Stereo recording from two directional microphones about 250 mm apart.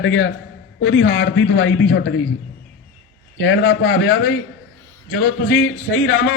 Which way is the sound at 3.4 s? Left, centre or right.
Left.